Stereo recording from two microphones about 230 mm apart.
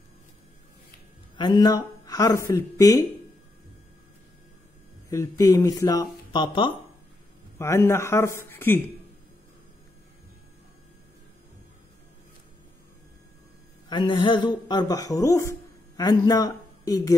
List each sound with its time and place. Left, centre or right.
1.3 s speech: centre
5.1 s speech: centre
13.8 s a man's voice: left